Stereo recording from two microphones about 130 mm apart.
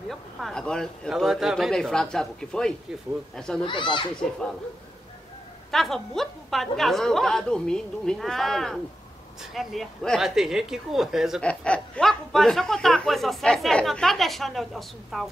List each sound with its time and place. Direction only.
0.1 s speech: 5° left (ahead or behind)
3.6 s speech: 40° left (ahead or behind)
5.7 s speech: centre (ahead or behind)
11.4 s speech: 10° left (ahead or behind)